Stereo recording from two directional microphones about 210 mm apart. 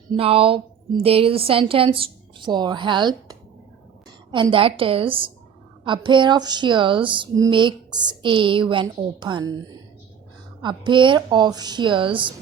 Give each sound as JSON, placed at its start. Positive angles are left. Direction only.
{"t": 0.1, "sound": "speech", "side_deg": -25}
{"t": 4.5, "sound": "speech", "side_deg": -25}